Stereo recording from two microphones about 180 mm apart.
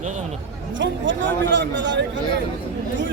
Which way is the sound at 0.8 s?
80° right.